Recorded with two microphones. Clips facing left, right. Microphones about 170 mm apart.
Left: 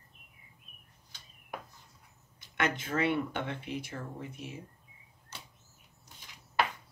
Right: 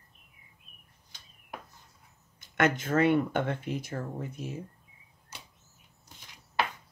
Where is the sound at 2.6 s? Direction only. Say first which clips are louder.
Right 6 dB; 45° right (ahead or behind).